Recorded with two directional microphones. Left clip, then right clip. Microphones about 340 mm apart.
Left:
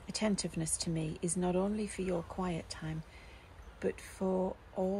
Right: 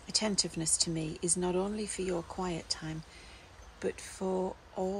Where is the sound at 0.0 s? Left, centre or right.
Centre.